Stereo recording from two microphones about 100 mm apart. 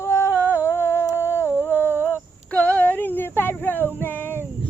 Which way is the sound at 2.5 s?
10° left (ahead or behind).